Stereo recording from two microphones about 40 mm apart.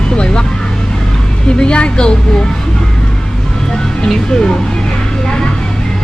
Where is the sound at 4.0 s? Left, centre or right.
Centre.